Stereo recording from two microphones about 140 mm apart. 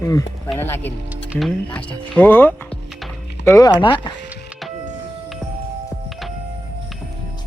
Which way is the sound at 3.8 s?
35° left (ahead or behind).